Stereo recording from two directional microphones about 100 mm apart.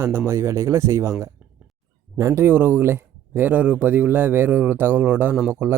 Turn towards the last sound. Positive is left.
turn(degrees=-25)  # may be behind; listen again after turning